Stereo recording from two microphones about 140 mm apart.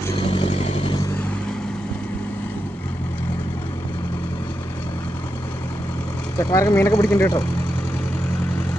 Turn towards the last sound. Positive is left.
turn(degrees=20)  # may be behind; listen again after turning